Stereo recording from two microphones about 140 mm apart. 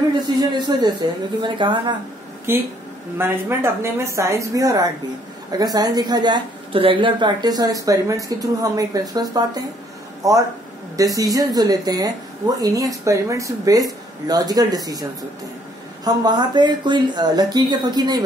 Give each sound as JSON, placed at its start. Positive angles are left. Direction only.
{"t": 0.4, "sound": "a woman's voice", "side_deg": -30}
{"t": 2.5, "sound": "a woman's voice", "side_deg": -15}